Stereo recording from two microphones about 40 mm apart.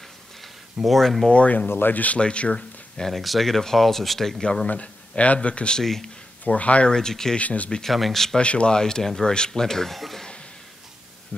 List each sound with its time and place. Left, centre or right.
0.8 s speech: centre
1.3 s speech: left
1.7 s speech: left
2.1 s speech: left
3.1 s speech: centre
4.4 s speech: centre
4.6 s speech: left
5.8 s speech: centre
6.4 s speech: left
6.9 s speech: centre
7.3 s speech: left
7.8 s speech: centre
8.4 s speech: left; by 10.2 s centre